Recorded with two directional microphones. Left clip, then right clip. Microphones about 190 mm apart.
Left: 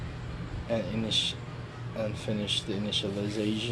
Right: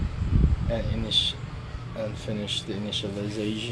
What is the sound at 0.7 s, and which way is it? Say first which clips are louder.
A man's voice: even; 5° left (ahead or behind).